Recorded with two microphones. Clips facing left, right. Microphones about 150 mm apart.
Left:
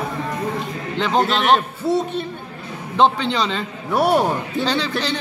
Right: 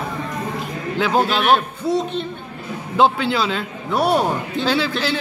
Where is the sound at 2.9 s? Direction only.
5° right (ahead or behind).